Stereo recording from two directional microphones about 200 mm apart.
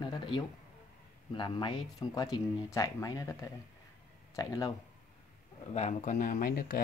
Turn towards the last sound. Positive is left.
turn(degrees=45)  # may be behind; listen again after turning